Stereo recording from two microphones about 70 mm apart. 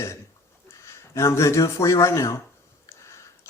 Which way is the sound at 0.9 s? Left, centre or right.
Left.